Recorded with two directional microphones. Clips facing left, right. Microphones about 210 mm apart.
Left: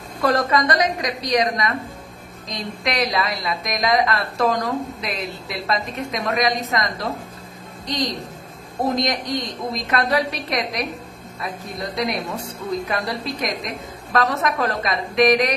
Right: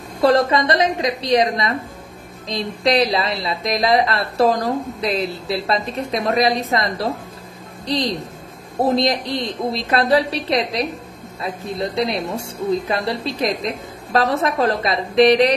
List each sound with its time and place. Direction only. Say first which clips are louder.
0.2 s a woman's voice: right 4 dB; 30° right (ahead or behind)